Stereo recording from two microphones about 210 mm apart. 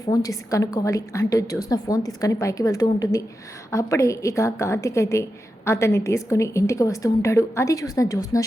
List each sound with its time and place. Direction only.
0.0 s a woman's voice: 15° left (ahead or behind)